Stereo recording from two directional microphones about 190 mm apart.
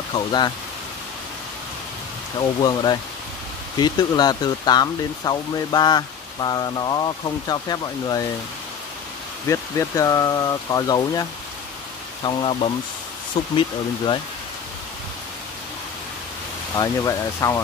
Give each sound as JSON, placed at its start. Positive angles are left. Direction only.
{"t": 0.1, "sound": "speech", "side_deg": 20}
{"t": 2.6, "sound": "speech", "side_deg": 20}
{"t": 9.5, "sound": "speech", "side_deg": 15}
{"t": 16.7, "sound": "speech", "side_deg": 20}